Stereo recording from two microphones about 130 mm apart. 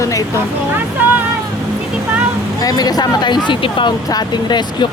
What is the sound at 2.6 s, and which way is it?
Speech, 30° left (ahead or behind).